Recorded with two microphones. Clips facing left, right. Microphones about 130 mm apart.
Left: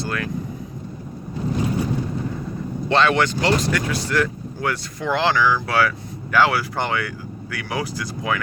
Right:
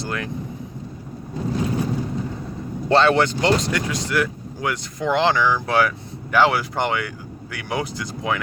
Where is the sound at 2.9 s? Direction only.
30° right (ahead or behind).